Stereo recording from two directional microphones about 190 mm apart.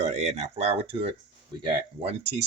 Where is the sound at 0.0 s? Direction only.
35° right (ahead or behind).